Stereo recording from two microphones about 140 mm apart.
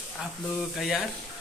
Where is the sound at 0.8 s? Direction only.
Centre (ahead or behind).